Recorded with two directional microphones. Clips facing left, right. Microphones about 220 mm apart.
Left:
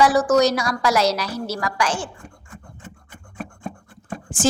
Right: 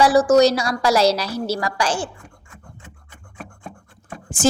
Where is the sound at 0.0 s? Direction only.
30° right (ahead or behind).